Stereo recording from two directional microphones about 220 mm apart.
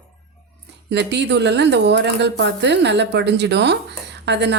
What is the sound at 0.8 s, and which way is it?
Speech, 50° right (ahead or behind).